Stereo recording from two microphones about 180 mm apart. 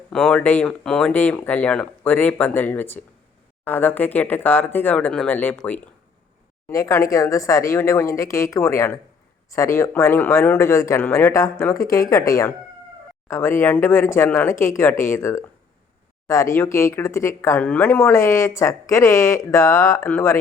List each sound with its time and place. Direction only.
0.1 s speech: 5° left (ahead or behind)